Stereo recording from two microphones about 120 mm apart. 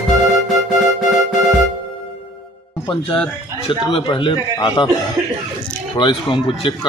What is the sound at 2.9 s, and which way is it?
Speech, 50° left (ahead or behind).